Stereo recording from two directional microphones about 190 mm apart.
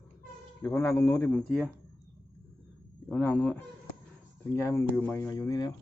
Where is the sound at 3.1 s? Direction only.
10° left (ahead or behind).